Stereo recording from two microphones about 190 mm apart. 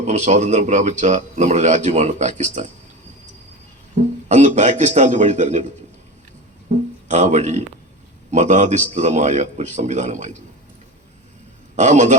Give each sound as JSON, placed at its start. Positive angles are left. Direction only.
{"t": 0.0, "sound": "speech", "side_deg": -40}
{"t": 3.9, "sound": "speech", "side_deg": -40}
{"t": 6.7, "sound": "speech", "side_deg": -40}
{"t": 11.8, "sound": "speech", "side_deg": -40}